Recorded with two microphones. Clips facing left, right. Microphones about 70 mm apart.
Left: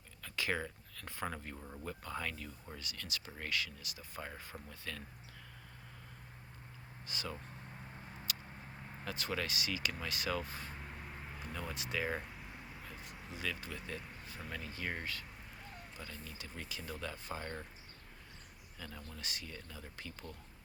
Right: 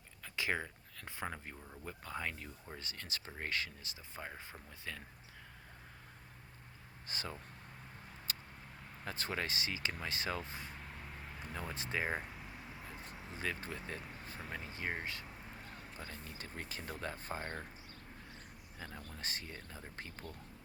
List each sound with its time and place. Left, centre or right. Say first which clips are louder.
0.2 s a sound: even; centre
1.8 s speech: even; centre
2.7 s speech: even; right
4.2 s speech: left 1 dB; centre
7.1 s speech: left 1 dB; right
8.3 s vehicle: even; right
9.0 s speech: even; right
16.0 s speech: right 1 dB; right
18.8 s speech: right 1 dB; right